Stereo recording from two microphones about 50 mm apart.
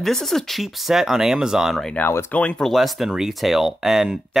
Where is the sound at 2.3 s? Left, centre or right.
Left.